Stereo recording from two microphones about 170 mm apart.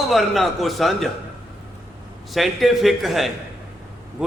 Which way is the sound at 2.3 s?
Centre (ahead or behind).